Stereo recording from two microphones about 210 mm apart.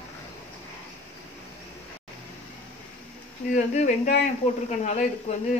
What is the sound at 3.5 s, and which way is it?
Speech, 35° left (ahead or behind).